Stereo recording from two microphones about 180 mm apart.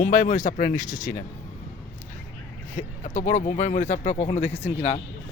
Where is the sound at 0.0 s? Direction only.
45° left (ahead or behind).